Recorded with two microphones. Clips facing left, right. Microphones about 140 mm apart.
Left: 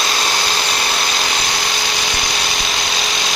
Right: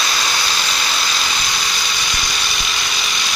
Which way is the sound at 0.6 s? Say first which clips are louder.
Left 3 dB; 50° left (ahead or behind).